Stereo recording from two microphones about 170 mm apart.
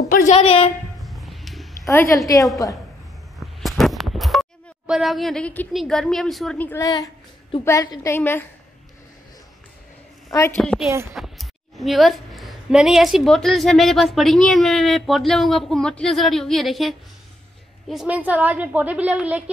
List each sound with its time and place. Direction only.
0.1 s a woman's voice: 45° left (ahead or behind)
0.9 s music: centre (ahead or behind)
1.9 s a woman's voice: 15° left (ahead or behind)
3.3 s a sound: centre (ahead or behind)
5.7 s a woman's voice: centre (ahead or behind)
10.3 s a woman's voice: 15° left (ahead or behind)
10.6 s a woman's voice: 5° left (ahead or behind)
10.9 s a woman's voice: 15° right (ahead or behind)
11.1 s a woman's voice: centre (ahead or behind)